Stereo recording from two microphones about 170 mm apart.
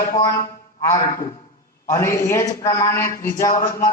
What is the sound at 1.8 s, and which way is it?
A man's voice, 15° left (ahead or behind).